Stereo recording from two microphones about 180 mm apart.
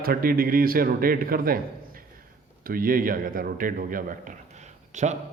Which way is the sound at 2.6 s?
50° right (ahead or behind).